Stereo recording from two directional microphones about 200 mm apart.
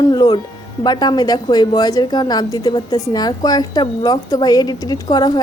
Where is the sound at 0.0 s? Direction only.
20° left (ahead or behind).